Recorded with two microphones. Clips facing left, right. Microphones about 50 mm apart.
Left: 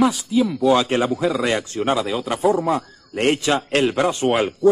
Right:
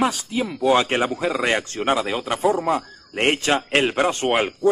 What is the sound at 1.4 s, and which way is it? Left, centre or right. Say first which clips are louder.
A man's voice: even; right.